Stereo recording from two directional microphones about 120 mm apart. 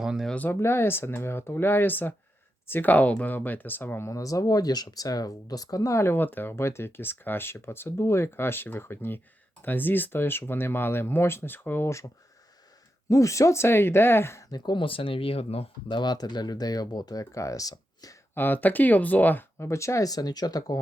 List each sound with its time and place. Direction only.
0.0 s speech: 5° right (ahead or behind)
0.3 s speech: 15° left (ahead or behind)
14.5 s speech: 40° left (ahead or behind); by 16.0 s 55° left (ahead or behind)
16.0 s speech: 35° left (ahead or behind)
18.3 s speech: 15° left (ahead or behind); by 20.7 s 30° left (ahead or behind)